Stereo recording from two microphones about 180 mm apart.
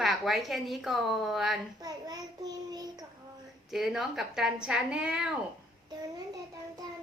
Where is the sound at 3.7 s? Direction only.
Centre (ahead or behind).